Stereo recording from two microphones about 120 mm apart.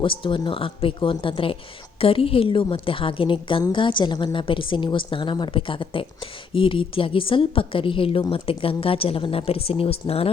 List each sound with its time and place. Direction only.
0.0 s a woman's voice: 45° left (ahead or behind)